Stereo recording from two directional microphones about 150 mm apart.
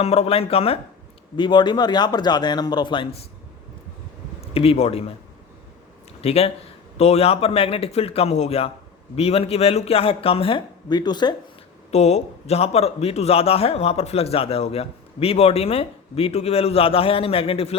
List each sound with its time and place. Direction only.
0.0 s a man's voice: 45° left (ahead or behind)
4.4 s speech: 40° left (ahead or behind)
6.2 s a man's voice: 45° left (ahead or behind)
11.9 s a man's voice: 45° left (ahead or behind)